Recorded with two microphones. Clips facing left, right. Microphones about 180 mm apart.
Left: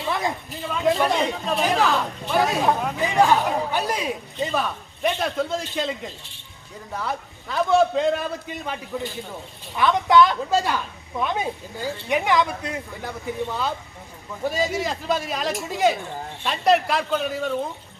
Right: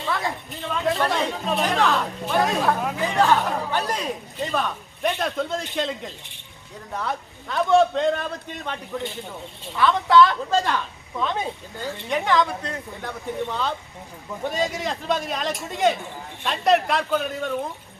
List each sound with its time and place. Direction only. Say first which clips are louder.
0.1 s a sound: left 1 dB; 20° left (ahead or behind)
0.5 s speech: left 3 dB; 5° left (ahead or behind)
9.7 s a woman's voice: even; 15° left (ahead or behind)